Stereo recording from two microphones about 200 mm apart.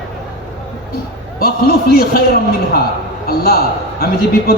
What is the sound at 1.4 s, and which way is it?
Speech, 50° left (ahead or behind).